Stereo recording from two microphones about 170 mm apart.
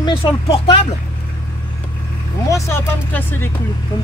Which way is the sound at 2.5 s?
15° left (ahead or behind).